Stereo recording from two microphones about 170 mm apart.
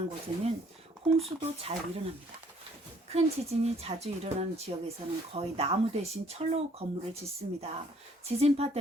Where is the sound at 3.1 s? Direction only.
40° right (ahead or behind).